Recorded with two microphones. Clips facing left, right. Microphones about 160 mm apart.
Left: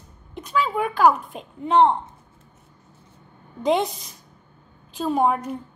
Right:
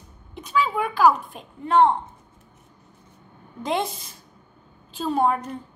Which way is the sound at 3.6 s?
15° left (ahead or behind).